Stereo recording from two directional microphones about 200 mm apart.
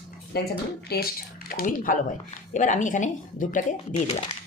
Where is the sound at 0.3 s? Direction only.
50° left (ahead or behind).